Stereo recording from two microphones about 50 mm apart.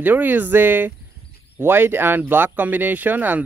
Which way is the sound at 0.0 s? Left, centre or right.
Right.